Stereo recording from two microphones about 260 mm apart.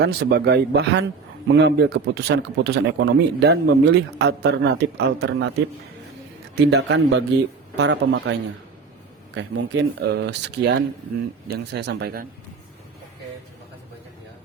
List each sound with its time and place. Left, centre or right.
0.0 s a man's voice: right
6.7 s a man's voice: right